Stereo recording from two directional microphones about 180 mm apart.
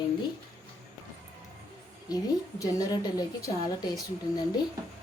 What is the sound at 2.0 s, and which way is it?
A woman's voice, 20° left (ahead or behind).